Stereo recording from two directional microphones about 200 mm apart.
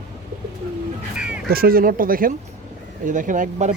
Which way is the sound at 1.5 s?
50° right (ahead or behind).